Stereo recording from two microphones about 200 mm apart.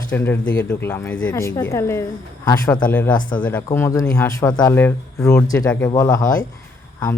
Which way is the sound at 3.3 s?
5° left (ahead or behind).